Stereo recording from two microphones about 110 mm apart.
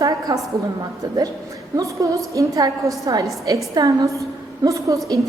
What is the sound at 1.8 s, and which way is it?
A woman's voice, 30° right (ahead or behind).